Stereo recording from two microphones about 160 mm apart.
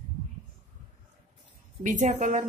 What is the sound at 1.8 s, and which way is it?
Speech, 50° right (ahead or behind).